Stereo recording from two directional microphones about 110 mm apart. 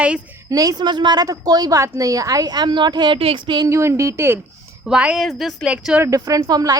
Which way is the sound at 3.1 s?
55° right (ahead or behind).